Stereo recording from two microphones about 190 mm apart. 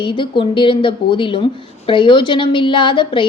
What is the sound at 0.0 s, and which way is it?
Speech, 25° left (ahead or behind).